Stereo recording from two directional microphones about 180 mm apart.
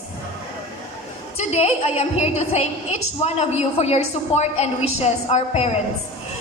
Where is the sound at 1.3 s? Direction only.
35° left (ahead or behind).